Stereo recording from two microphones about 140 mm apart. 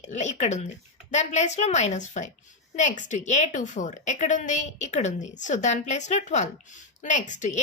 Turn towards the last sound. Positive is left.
turn(degrees=60)  # may be behind; listen again after turning